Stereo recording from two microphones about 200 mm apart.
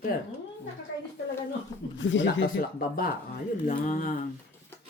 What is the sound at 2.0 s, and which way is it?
Speech, 70° left (ahead or behind).